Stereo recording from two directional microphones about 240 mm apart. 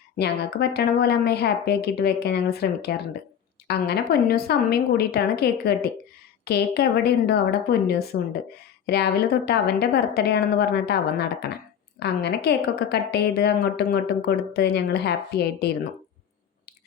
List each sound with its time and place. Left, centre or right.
0.7 s a woman's voice: left